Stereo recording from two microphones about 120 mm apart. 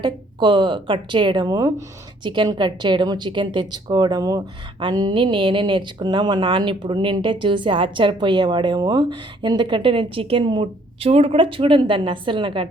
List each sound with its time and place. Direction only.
0.0 s a woman's voice: 40° right (ahead or behind)